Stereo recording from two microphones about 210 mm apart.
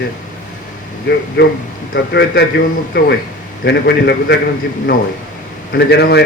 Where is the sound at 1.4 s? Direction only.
50° left (ahead or behind).